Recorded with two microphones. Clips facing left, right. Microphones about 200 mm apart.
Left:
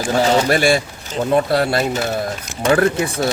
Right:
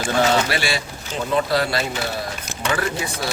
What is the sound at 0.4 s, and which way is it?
Speech, 50° left (ahead or behind).